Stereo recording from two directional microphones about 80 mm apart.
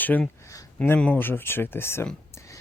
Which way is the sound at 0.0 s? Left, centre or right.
Left.